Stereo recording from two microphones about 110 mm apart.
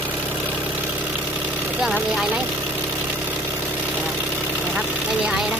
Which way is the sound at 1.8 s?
5° right (ahead or behind).